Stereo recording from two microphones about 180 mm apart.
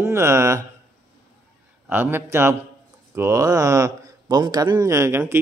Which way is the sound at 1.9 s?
10° right (ahead or behind).